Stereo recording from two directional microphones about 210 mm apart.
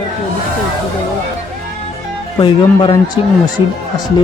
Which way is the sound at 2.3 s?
20° left (ahead or behind).